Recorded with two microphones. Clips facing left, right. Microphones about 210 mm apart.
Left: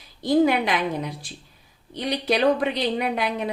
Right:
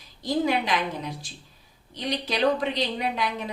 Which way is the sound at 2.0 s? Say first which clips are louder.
Left 4 dB; 60° left (ahead or behind).